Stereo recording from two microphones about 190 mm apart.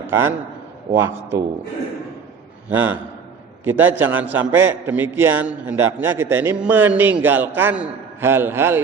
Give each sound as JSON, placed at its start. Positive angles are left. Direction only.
{"t": 0.1, "sound": "a man's voice", "side_deg": -10}
{"t": 2.6, "sound": "a man's voice", "side_deg": -10}